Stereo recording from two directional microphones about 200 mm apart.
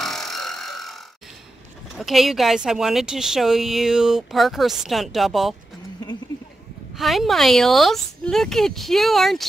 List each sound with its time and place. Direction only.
0.0 s a sound: centre (ahead or behind)
2.0 s speech: centre (ahead or behind)
7.0 s speech: centre (ahead or behind)